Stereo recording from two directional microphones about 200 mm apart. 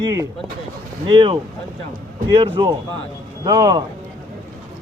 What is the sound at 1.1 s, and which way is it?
Speech, 25° right (ahead or behind).